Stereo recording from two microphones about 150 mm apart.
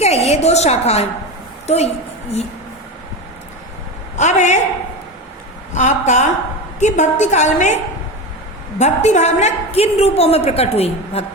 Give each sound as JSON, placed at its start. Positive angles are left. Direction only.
{"t": 0.0, "sound": "a sound", "side_deg": 45}
{"t": 1.6, "sound": "a woman's voice", "side_deg": 45}
{"t": 4.2, "sound": "a man's voice", "side_deg": 50}
{"t": 5.7, "sound": "a woman's voice", "side_deg": 55}
{"t": 8.8, "sound": "a woman's voice", "side_deg": 50}